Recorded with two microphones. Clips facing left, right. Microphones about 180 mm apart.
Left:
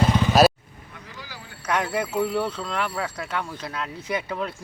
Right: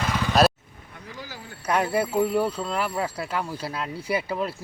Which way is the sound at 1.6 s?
30° right (ahead or behind).